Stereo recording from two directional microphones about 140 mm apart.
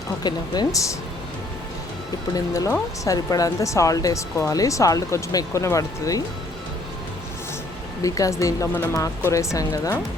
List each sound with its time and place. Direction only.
0.2 s speech: 30° left (ahead or behind)
2.3 s speech: 25° left (ahead or behind)
8.0 s speech: 25° left (ahead or behind)